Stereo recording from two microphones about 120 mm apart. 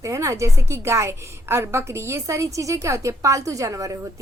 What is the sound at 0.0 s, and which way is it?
A woman's voice, 25° right (ahead or behind).